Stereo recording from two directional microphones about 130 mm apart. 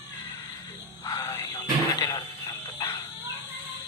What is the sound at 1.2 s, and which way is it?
Speech, 30° left (ahead or behind).